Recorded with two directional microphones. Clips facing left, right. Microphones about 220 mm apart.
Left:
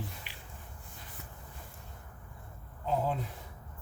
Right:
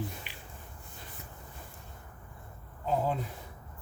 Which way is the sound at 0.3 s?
15° right (ahead or behind).